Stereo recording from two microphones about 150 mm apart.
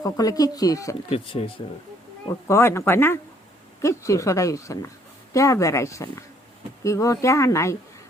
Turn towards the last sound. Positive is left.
turn(degrees=20)  # may be behind; listen again after turning